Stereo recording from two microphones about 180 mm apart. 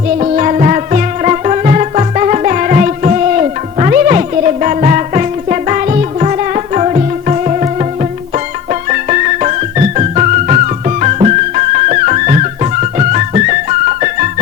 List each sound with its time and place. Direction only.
0.2 s music: 40° right (ahead or behind)